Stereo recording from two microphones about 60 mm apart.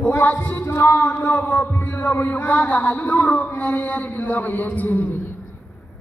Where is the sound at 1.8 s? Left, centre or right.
Left.